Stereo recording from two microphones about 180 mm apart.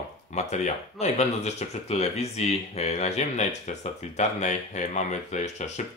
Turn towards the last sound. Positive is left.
turn(degrees=40)  # may be behind; listen again after turning